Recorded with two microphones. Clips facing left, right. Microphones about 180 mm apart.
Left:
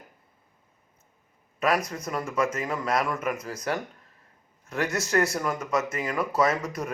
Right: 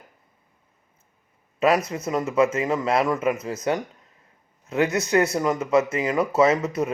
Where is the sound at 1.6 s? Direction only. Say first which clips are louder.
Right 5 dB; 25° right (ahead or behind).